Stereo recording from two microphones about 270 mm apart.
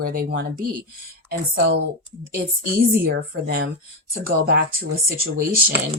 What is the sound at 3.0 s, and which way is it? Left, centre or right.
A woman's voice, right.